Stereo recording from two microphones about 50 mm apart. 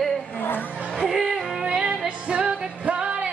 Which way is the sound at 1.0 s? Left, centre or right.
Centre.